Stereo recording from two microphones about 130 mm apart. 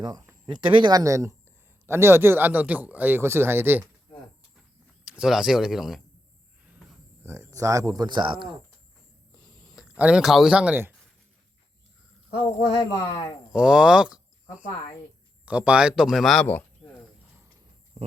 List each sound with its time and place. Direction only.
0.0 s speech: 30° right (ahead or behind); by 3.8 s 15° right (ahead or behind)
5.0 s speech: 5° right (ahead or behind)
7.3 s speech: 25° right (ahead or behind); by 8.5 s 40° right (ahead or behind)
9.6 s a sound: 5° right (ahead or behind)
10.0 s speech: 5° right (ahead or behind)
12.4 s speech: 35° left (ahead or behind)
13.5 s speech: 5° right (ahead or behind)
18.0 s a sound: 55° right (ahead or behind)